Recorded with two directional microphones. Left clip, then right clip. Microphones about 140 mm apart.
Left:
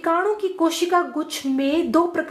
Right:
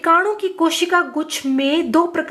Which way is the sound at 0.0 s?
35° right (ahead or behind).